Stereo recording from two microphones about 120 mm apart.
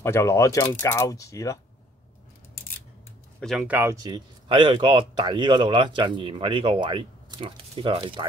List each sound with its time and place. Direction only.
0.0 s speech: 20° left (ahead or behind)
3.5 s speech: 15° right (ahead or behind)
3.9 s speech: 30° right (ahead or behind)
4.5 s a man's voice: 45° right (ahead or behind)